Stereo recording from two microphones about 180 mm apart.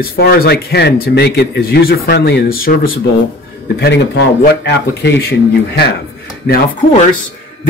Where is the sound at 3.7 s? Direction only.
75° left (ahead or behind); by 6.6 s 55° left (ahead or behind).